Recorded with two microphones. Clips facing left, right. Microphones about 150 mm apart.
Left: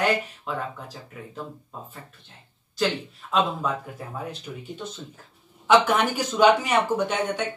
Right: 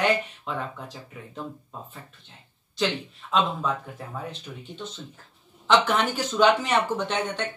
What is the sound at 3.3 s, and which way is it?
Speech, 5° left (ahead or behind).